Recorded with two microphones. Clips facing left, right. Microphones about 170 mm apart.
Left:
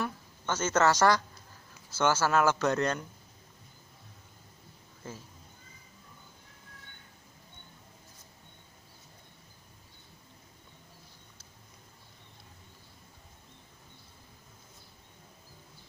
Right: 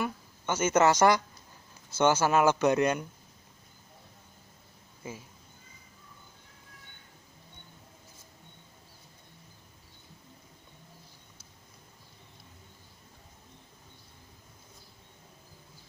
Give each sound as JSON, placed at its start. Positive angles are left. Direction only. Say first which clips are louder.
{"t": 0.0, "sound": "a woman's voice", "louder": "right 2 dB", "side_deg": -15}
{"t": 5.0, "sound": "speech", "louder": "right 2 dB", "side_deg": -10}